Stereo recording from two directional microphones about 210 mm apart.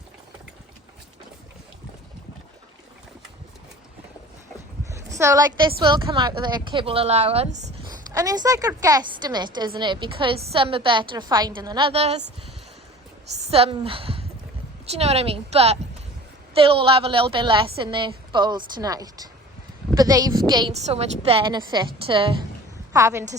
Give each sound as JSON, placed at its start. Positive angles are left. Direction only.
{"t": 4.9, "sound": "a woman's voice", "side_deg": -15}
{"t": 7.9, "sound": "a woman's voice", "side_deg": -15}
{"t": 13.4, "sound": "a woman's voice", "side_deg": -25}
{"t": 22.9, "sound": "a woman's voice", "side_deg": -15}